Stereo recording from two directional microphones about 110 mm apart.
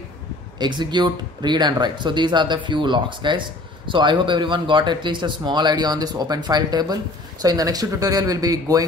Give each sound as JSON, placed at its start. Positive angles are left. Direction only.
{"t": 0.6, "sound": "speech", "side_deg": -40}